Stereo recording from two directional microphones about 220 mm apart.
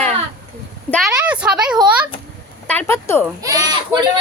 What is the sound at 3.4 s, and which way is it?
Speech, 15° right (ahead or behind).